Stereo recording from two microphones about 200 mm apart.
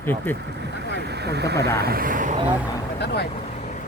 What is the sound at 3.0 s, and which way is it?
Speech, 55° left (ahead or behind).